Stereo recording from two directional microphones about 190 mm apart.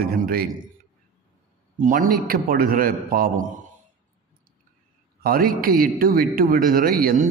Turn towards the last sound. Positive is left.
turn(degrees=-45)  # may be behind; listen again after turning